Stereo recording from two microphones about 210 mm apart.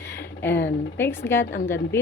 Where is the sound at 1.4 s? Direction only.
55° left (ahead or behind).